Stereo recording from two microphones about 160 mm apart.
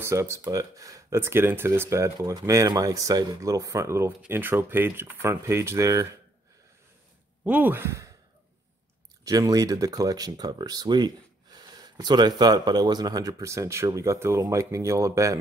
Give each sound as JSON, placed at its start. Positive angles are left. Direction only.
{"t": 0.0, "sound": "speech", "side_deg": -15}
{"t": 7.4, "sound": "speech", "side_deg": -10}
{"t": 9.2, "sound": "speech", "side_deg": -20}